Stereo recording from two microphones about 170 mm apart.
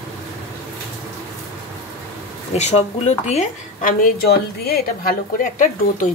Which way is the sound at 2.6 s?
40° left (ahead or behind).